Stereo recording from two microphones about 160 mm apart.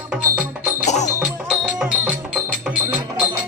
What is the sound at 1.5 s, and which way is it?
Music, 5° right (ahead or behind).